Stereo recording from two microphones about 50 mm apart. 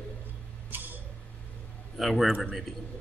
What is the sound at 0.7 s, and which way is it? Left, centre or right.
Tick-tock, right.